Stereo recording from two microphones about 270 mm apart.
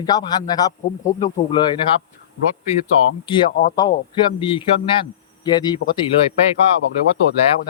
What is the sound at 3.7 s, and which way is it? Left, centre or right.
Speech, centre.